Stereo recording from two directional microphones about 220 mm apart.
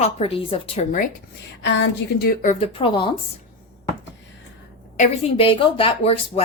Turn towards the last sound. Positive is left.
turn(degrees=25)  # may be behind; listen again after turning